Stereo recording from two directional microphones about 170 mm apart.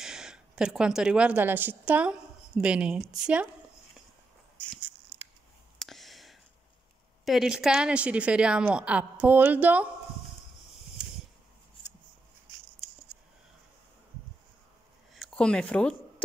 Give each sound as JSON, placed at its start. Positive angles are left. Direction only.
{"t": 0.0, "sound": "speech", "side_deg": -5}
{"t": 5.8, "sound": "a sound", "side_deg": 0}
{"t": 7.2, "sound": "a woman's voice", "side_deg": -5}
{"t": 15.1, "sound": "speech", "side_deg": 5}